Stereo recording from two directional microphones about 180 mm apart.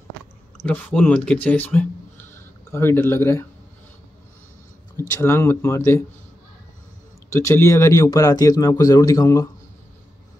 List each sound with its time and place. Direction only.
0.6 s speech: 10° left (ahead or behind)
4.9 s speech: 15° left (ahead or behind)
7.2 s speech: 15° left (ahead or behind)